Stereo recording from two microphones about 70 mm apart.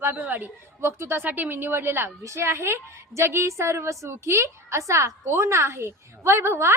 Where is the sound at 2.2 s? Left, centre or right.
Right.